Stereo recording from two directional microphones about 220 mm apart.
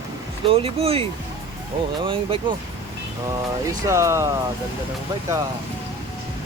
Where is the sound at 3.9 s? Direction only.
15° right (ahead or behind).